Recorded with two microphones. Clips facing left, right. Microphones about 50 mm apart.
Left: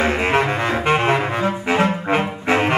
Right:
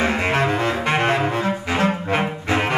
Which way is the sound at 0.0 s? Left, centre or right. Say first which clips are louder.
Left 2 dB; left.